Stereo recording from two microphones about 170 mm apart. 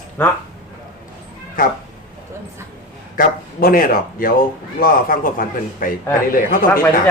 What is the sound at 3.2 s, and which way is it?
Speech, 55° left (ahead or behind).